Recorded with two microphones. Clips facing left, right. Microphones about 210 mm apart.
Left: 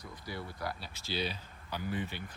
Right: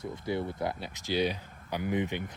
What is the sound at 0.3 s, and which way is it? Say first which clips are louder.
Speech: right 8 dB; 20° right (ahead or behind).